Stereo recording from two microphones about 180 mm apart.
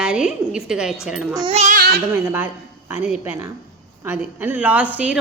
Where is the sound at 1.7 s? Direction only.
55° right (ahead or behind).